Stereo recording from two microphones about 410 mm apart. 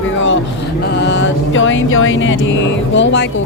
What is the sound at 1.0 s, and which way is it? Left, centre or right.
Speech, left.